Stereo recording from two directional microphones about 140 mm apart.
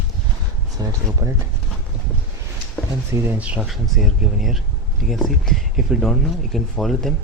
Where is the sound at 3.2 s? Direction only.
10° right (ahead or behind).